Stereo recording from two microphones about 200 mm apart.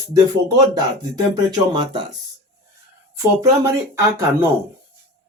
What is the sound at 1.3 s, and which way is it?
Speech, 20° right (ahead or behind).